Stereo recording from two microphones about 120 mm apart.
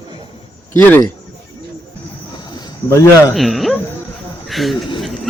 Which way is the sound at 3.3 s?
Centre (ahead or behind).